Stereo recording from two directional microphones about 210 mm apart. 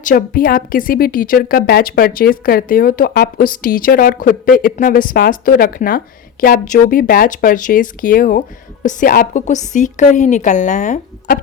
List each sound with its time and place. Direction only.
0.0 s a woman's voice: 40° left (ahead or behind)